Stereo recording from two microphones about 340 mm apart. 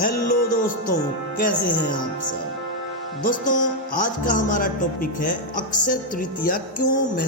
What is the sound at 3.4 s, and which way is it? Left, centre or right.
Music, left.